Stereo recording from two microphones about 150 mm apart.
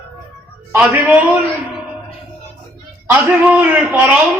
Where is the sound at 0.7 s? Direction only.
20° right (ahead or behind).